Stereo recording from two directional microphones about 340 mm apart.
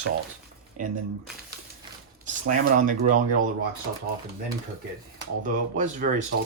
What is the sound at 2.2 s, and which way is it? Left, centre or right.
Speech, right.